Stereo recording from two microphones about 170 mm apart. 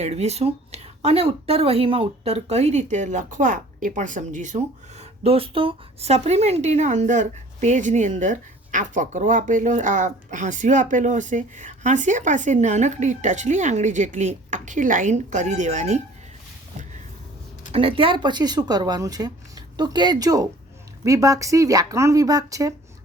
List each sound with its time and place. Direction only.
0.0 s a woman's voice: 40° right (ahead or behind)
17.7 s speech: 35° right (ahead or behind)